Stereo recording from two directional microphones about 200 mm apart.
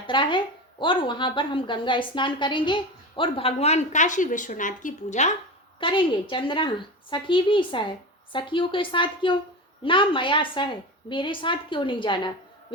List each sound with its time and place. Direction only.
0.1 s a woman's voice: 25° left (ahead or behind)
5.8 s a woman's voice: 25° left (ahead or behind)